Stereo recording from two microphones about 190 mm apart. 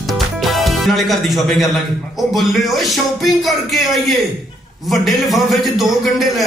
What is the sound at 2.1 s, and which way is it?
A man's voice, centre (ahead or behind).